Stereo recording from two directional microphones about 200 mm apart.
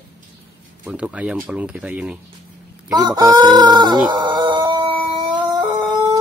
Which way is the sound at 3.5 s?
20° right (ahead or behind).